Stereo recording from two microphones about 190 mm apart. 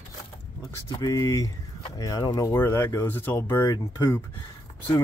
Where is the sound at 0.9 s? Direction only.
20° left (ahead or behind).